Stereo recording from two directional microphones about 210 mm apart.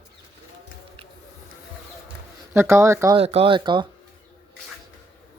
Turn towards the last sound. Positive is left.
turn(degrees=-20)  # may be behind; listen again after turning